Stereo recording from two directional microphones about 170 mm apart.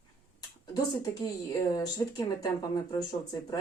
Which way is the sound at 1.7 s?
25° left (ahead or behind).